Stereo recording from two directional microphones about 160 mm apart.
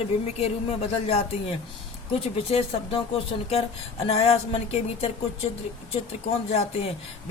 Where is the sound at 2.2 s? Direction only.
35° left (ahead or behind).